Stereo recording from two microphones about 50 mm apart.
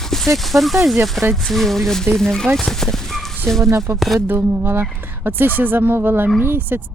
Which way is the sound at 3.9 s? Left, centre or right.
Right.